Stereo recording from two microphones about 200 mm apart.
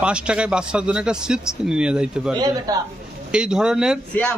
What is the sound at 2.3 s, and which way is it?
Speech, 20° right (ahead or behind).